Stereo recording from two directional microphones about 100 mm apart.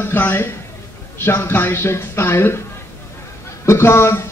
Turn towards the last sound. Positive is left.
turn(degrees=25)  # may be behind; listen again after turning